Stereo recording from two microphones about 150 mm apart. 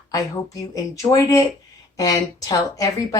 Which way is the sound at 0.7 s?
20° left (ahead or behind).